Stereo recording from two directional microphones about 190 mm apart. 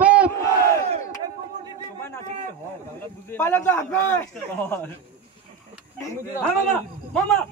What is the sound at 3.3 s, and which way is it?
Speech, 15° left (ahead or behind).